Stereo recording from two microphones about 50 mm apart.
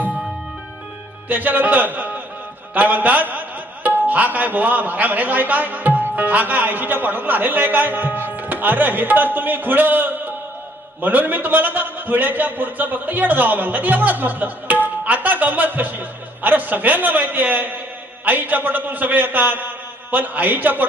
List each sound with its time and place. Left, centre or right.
1.3 s a man's voice: right